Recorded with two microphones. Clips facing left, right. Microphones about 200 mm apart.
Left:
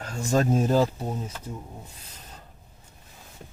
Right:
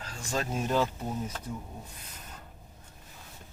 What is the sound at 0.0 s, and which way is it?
Speech, 45° left (ahead or behind).